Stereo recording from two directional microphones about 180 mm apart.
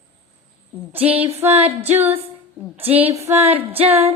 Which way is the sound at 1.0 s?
30° right (ahead or behind).